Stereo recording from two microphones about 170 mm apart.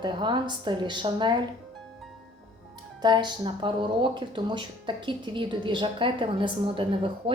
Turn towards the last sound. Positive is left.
turn(degrees=-30)  # may be behind; listen again after turning